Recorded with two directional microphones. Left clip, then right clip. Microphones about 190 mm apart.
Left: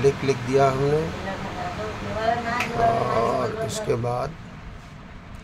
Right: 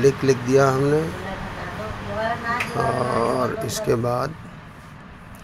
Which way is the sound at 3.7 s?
20° right (ahead or behind).